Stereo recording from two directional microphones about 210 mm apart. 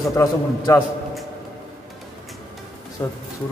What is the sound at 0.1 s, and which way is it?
Speech, 15° left (ahead or behind).